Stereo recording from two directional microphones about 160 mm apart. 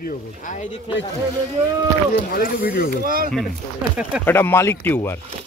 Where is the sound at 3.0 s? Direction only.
65° right (ahead or behind).